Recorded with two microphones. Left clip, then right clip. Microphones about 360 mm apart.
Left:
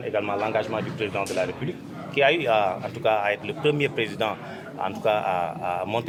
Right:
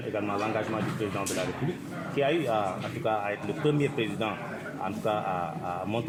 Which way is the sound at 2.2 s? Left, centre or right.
Left.